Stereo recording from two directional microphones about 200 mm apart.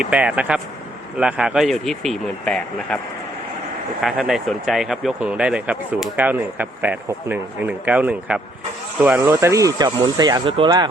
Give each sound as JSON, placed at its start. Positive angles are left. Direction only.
{"t": 0.0, "sound": "speech", "side_deg": -5}
{"t": 4.0, "sound": "speech", "side_deg": 0}